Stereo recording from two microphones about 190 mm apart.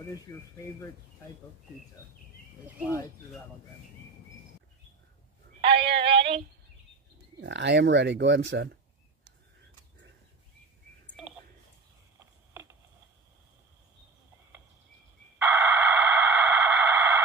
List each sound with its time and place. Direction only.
0.3 s speech: 15° left (ahead or behind)
2.6 s speech: 10° right (ahead or behind)
5.7 s synthetic singing: 30° right (ahead or behind)
7.3 s speech: 65° right (ahead or behind)
11.1 s a sound: centre (ahead or behind)
15.3 s a sound: 10° right (ahead or behind)